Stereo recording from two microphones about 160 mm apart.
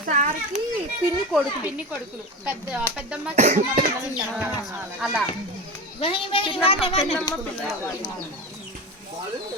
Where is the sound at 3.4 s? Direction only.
55° right (ahead or behind).